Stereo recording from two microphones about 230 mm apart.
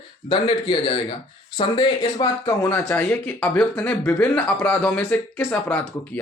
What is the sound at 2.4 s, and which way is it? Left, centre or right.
Speech, centre.